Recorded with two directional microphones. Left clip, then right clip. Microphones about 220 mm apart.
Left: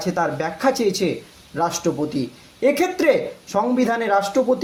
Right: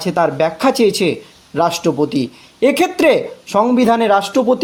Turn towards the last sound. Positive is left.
turn(degrees=-45)  # may be behind; listen again after turning